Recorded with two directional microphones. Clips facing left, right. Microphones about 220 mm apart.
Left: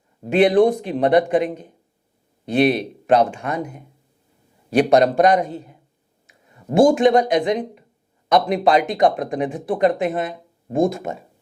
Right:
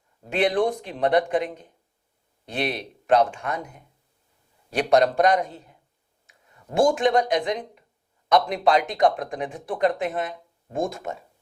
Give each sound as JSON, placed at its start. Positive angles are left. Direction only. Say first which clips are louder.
{"t": 0.3, "sound": "speech", "louder": "left 8 dB", "side_deg": 10}
{"t": 6.2, "sound": "a sound", "louder": "left 13 dB", "side_deg": 20}
{"t": 6.9, "sound": "speech", "louder": "left 6 dB", "side_deg": 10}